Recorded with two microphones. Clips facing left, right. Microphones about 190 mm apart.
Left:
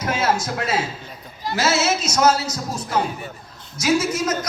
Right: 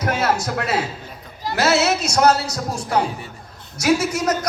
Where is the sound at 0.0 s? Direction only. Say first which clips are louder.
Right 1 dB; 65° right (ahead or behind).